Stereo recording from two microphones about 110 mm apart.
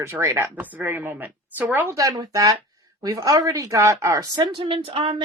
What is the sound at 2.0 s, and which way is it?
Speech, 35° right (ahead or behind).